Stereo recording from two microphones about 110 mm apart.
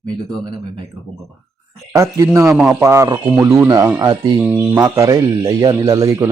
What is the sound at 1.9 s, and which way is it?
Speech, 25° right (ahead or behind).